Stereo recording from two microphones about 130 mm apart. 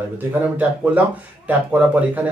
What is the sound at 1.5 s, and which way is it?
Speech, 10° right (ahead or behind).